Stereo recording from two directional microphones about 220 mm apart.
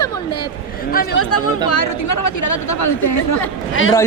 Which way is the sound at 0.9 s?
40° left (ahead or behind).